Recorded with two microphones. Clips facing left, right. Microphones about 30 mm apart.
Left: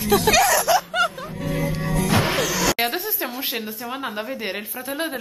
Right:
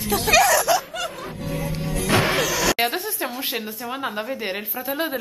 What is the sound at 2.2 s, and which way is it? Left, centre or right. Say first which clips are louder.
Speech: right 1 dB; centre.